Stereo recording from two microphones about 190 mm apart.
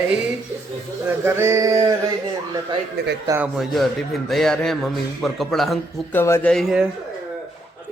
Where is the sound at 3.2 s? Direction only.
10° right (ahead or behind).